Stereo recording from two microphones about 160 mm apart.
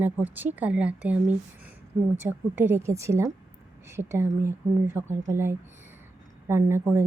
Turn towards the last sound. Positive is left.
turn(degrees=-15)  # may be behind; listen again after turning